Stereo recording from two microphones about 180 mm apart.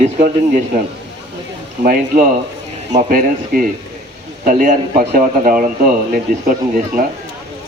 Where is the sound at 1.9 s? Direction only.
50° right (ahead or behind).